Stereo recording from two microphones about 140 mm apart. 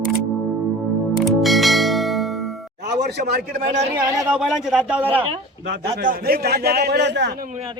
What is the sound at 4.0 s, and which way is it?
Speech, 15° right (ahead or behind).